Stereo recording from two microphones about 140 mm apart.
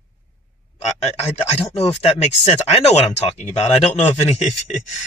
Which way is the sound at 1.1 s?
45° left (ahead or behind).